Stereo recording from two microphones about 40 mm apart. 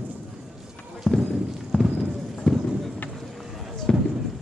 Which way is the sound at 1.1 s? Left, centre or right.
Centre.